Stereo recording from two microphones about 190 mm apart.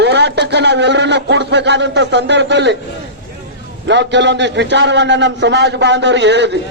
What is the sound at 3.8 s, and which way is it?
A man's voice, 70° right (ahead or behind).